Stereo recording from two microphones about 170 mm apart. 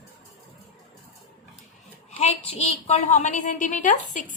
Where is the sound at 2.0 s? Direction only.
35° left (ahead or behind).